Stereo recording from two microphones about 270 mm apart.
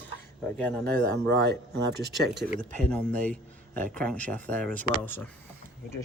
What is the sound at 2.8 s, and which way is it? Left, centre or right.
Speech, centre.